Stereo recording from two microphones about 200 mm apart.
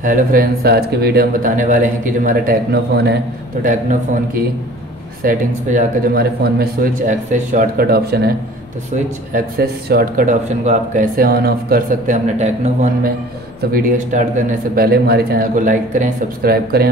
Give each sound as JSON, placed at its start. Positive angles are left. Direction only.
{"t": 0.0, "sound": "speech", "side_deg": -45}
{"t": 3.6, "sound": "a man's voice", "side_deg": -40}
{"t": 13.6, "sound": "speech", "side_deg": -45}